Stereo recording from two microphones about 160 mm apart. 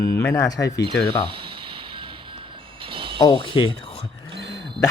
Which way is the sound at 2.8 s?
35° right (ahead or behind).